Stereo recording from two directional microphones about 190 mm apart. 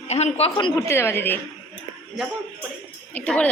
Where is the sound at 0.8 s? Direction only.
15° left (ahead or behind).